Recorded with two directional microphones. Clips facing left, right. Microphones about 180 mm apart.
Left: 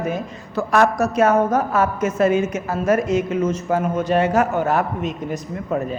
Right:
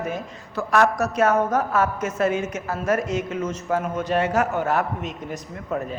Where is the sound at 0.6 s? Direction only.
25° left (ahead or behind).